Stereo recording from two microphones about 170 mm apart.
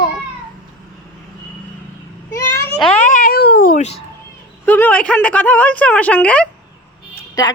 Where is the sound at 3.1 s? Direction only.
55° left (ahead or behind).